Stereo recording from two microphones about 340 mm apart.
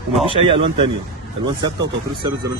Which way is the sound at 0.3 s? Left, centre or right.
Centre.